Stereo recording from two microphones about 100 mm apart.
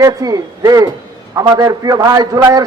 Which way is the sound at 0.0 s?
40° right (ahead or behind).